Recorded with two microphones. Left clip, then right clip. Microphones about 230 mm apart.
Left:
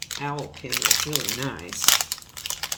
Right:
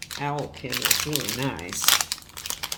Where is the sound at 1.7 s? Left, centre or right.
Centre.